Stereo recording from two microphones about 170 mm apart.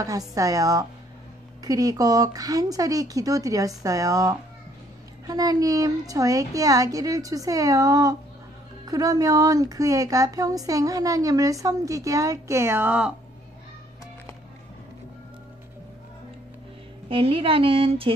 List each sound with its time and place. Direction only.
0.3 s speech: 20° right (ahead or behind)
17.1 s a woman's voice: 35° right (ahead or behind)